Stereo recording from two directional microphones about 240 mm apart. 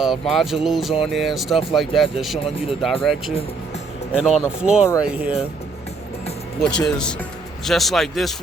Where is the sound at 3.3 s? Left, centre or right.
Left.